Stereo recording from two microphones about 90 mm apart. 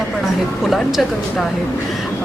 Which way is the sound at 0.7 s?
Centre (ahead or behind).